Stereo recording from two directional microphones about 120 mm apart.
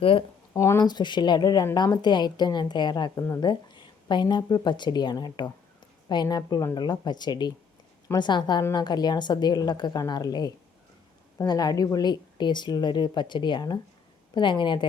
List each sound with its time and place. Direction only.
0.0 s speech: 50° left (ahead or behind)
0.5 s speech: 25° left (ahead or behind)
0.8 s speech: 35° left (ahead or behind)
3.4 s speech: 40° left (ahead or behind)